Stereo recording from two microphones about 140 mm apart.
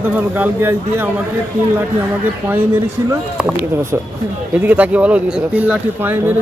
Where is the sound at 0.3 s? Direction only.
15° right (ahead or behind).